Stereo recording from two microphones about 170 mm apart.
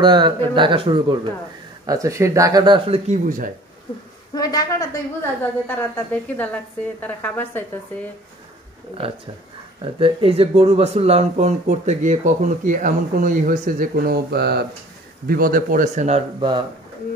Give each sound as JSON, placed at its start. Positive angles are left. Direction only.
{"t": 0.0, "sound": "speech", "side_deg": -25}
{"t": 1.9, "sound": "speech", "side_deg": -20}
{"t": 3.1, "sound": "speech", "side_deg": -55}
{"t": 4.4, "sound": "a woman's voice", "side_deg": 25}
{"t": 5.9, "sound": "a woman's voice", "side_deg": 10}
{"t": 9.8, "sound": "speech", "side_deg": -30}
{"t": 15.2, "sound": "speech", "side_deg": -60}
{"t": 16.3, "sound": "speech", "side_deg": -30}